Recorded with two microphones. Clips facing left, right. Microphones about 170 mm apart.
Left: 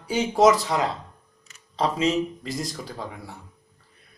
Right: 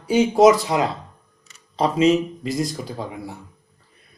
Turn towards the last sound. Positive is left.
turn(degrees=-15)  # may be behind; listen again after turning